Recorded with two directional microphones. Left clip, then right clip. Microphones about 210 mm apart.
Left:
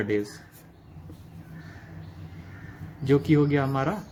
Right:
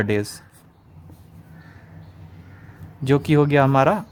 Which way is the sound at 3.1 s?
35° right (ahead or behind).